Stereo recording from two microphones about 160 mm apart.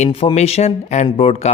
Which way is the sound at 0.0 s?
35° left (ahead or behind).